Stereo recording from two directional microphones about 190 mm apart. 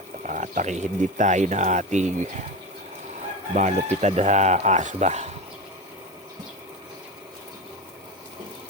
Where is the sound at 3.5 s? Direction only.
40° right (ahead or behind).